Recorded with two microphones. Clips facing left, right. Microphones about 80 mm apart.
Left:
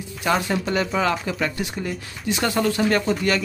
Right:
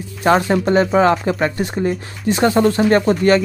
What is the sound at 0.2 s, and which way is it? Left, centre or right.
Speech, right.